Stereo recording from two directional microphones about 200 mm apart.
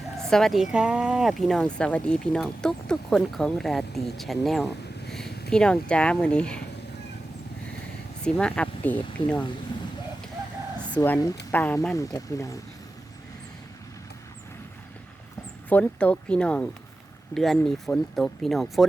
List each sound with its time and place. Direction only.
0.2 s speech: centre (ahead or behind)
8.2 s speech: 5° left (ahead or behind)
10.8 s speech: 5° left (ahead or behind)
15.7 s speech: 5° left (ahead or behind)